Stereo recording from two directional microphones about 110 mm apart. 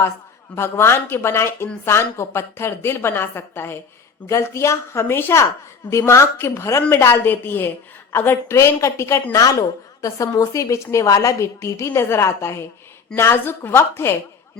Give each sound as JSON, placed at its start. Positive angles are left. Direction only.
{"t": 0.5, "sound": "a woman's voice", "side_deg": 25}